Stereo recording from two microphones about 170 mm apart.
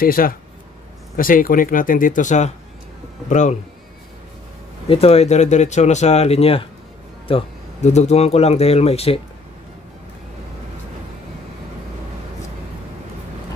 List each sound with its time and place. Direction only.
0.0 s speech: 60° left (ahead or behind)
4.8 s speech: 35° left (ahead or behind)